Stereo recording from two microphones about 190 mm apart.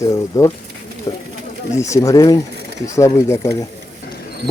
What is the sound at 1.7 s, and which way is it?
Speech, 15° left (ahead or behind).